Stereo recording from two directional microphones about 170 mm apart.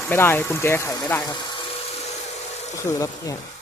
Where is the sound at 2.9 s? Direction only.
25° left (ahead or behind).